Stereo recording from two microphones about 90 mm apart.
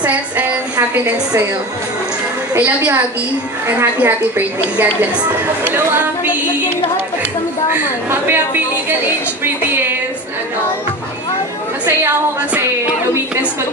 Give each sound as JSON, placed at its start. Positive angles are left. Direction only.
{"t": 0.0, "sound": "a woman's voice", "side_deg": -15}
{"t": 2.5, "sound": "a woman's voice", "side_deg": -25}
{"t": 7.7, "sound": "a woman's voice", "side_deg": -20}
{"t": 9.4, "sound": "music", "side_deg": -25}
{"t": 12.5, "sound": "a sound", "side_deg": -25}